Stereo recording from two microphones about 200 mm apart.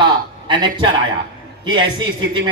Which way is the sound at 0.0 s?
25° right (ahead or behind).